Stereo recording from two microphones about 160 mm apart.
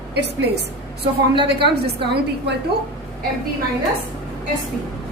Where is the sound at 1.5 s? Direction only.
90° right.